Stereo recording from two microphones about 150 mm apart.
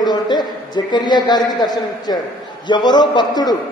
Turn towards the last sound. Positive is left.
turn(degrees=25)  # may be behind; listen again after turning